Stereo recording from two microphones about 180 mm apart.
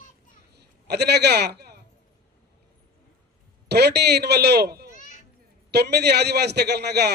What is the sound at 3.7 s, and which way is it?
A man's voice, 65° right (ahead or behind).